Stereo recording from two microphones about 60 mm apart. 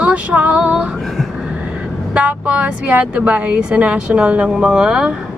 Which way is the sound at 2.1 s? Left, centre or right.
Right.